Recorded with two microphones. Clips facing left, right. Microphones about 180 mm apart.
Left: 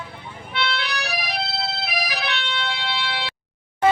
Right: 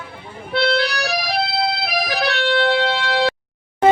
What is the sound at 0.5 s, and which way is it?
Music, 35° right (ahead or behind).